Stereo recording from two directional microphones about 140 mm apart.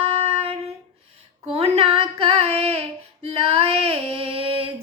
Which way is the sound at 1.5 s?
45° right (ahead or behind).